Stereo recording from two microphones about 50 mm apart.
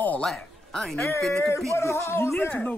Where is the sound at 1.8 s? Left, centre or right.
Left.